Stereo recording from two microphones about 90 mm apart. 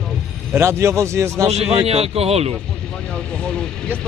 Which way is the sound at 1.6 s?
90° right.